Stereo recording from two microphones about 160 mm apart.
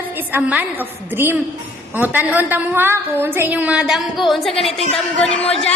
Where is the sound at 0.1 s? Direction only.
10° right (ahead or behind).